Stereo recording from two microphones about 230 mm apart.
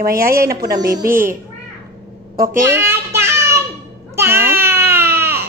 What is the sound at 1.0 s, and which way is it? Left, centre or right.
A child's voice, right.